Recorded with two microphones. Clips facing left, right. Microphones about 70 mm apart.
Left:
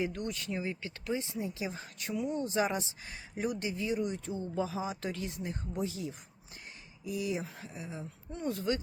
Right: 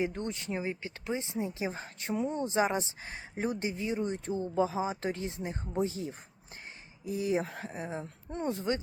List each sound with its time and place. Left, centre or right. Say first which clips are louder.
0.0 s speech: right 2 dB; right
7.4 s speech: right 5 dB; right
7.7 s speech: right 5 dB; right
8.4 s speech: right 1 dB; right